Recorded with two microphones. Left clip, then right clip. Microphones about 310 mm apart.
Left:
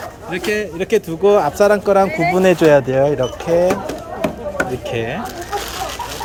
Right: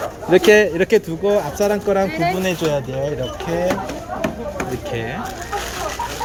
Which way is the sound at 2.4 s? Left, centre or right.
Left.